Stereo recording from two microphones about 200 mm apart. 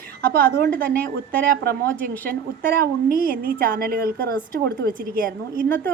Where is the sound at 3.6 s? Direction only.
50° right (ahead or behind).